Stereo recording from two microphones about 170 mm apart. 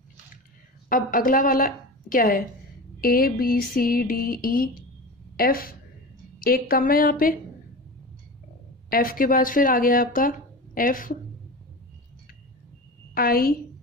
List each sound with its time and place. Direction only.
0.8 s a woman's voice: 55° left (ahead or behind)
3.0 s a sound: 60° left (ahead or behind)
8.8 s speech: 60° left (ahead or behind)
13.1 s a woman's voice: 60° left (ahead or behind)